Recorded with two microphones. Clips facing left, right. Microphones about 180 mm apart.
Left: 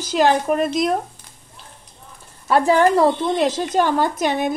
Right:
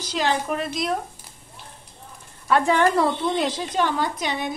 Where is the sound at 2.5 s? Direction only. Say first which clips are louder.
Left 4 dB; 35° left (ahead or behind).